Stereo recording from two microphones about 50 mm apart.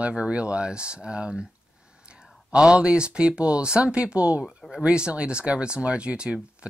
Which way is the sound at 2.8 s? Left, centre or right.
Right.